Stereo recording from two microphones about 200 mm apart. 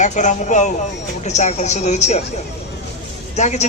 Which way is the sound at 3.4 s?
35° left (ahead or behind).